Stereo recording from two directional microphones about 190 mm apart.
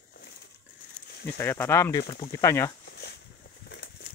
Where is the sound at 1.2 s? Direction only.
10° left (ahead or behind).